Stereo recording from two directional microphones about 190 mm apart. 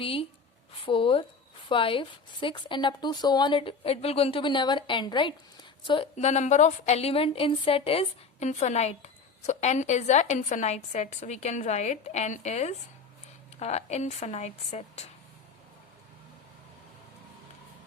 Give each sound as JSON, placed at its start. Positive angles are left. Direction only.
{"t": 0.0, "sound": "a woman's voice", "side_deg": 30}